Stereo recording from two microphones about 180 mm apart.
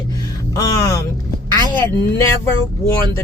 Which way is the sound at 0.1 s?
20° left (ahead or behind).